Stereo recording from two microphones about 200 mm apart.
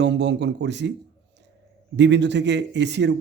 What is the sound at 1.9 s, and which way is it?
Speech, 60° right (ahead or behind).